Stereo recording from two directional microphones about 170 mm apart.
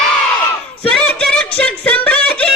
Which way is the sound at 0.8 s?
5° left (ahead or behind).